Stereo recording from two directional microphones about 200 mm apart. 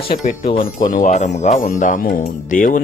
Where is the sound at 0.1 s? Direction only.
40° left (ahead or behind).